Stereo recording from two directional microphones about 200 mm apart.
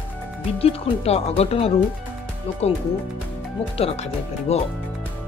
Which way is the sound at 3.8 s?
30° left (ahead or behind).